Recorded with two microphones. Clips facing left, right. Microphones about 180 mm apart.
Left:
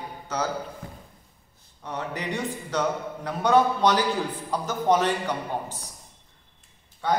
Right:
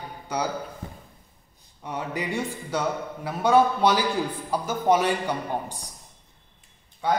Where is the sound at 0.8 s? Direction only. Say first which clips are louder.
Right 2 dB; 20° right (ahead or behind).